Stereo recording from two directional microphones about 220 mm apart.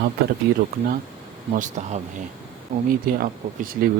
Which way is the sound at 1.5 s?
35° right (ahead or behind).